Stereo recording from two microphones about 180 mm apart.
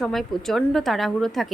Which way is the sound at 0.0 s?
Centre (ahead or behind).